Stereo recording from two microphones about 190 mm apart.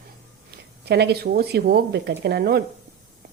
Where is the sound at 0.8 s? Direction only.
60° right (ahead or behind).